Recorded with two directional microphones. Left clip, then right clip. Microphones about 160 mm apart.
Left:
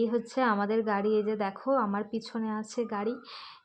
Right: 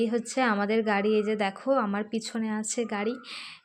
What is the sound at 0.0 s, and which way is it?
Speech, 20° right (ahead or behind).